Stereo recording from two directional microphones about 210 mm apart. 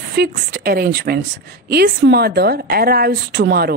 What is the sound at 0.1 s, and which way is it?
A woman's voice, 50° right (ahead or behind).